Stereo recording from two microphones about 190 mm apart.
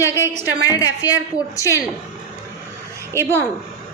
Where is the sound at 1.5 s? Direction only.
15° left (ahead or behind).